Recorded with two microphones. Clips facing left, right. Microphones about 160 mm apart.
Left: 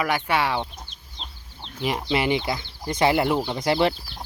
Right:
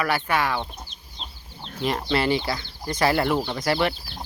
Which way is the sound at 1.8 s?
10° left (ahead or behind).